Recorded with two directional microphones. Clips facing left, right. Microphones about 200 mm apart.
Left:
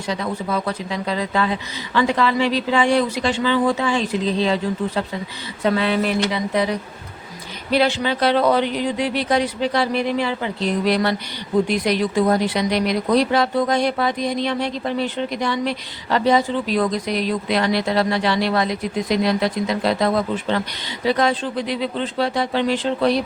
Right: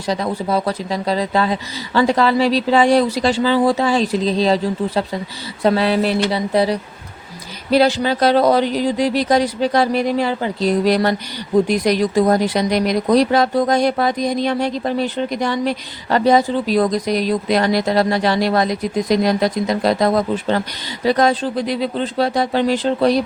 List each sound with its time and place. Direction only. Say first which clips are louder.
0.1 s speech: right 4 dB; 35° right (ahead or behind)